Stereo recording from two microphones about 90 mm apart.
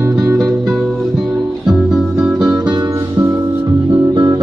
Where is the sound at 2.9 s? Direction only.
30° right (ahead or behind).